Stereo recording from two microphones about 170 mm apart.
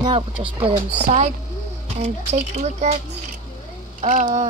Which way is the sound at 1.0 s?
50° right (ahead or behind).